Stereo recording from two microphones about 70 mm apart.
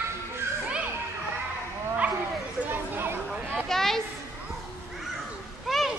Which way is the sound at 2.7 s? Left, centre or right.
Right.